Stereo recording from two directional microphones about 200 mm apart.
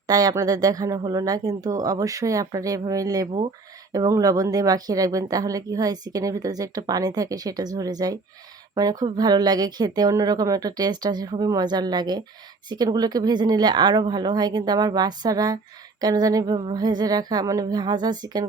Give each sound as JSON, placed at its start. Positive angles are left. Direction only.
{"t": 0.1, "sound": "speech", "side_deg": -20}